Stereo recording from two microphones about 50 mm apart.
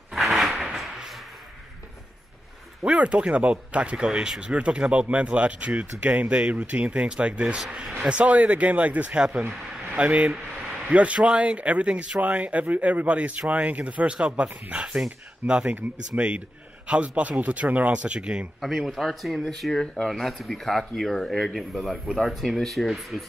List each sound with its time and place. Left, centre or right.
0.1 s a sound: centre
2.8 s speech: right
18.6 s speech: centre